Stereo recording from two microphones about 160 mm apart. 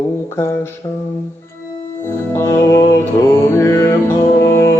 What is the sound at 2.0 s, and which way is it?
Music, 15° left (ahead or behind).